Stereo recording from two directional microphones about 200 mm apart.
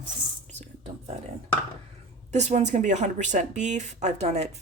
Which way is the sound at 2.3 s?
35° right (ahead or behind).